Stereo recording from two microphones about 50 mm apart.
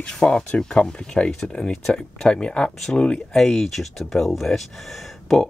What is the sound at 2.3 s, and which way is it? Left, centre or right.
Speech, centre.